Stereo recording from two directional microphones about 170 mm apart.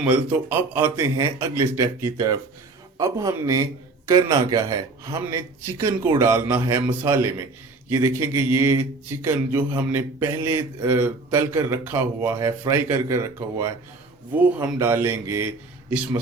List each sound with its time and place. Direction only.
0.0 s mantra: 10° right (ahead or behind)
3.0 s a man's voice: 20° right (ahead or behind)
4.1 s mantra: 20° right (ahead or behind)